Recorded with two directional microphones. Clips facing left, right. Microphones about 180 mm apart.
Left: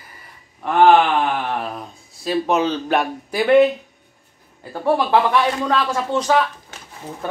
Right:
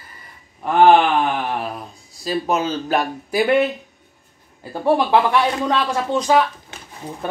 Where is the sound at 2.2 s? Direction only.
5° right (ahead or behind).